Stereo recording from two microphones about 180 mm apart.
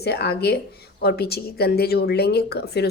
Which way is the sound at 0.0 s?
65° left (ahead or behind).